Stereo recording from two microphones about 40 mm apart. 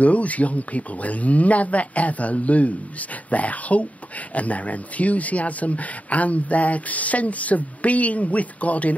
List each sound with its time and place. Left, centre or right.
0.0 s speech: left